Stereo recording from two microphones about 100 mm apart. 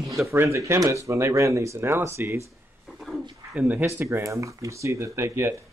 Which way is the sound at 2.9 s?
Centre (ahead or behind).